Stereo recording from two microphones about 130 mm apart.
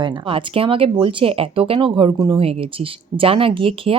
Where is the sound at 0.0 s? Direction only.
40° right (ahead or behind).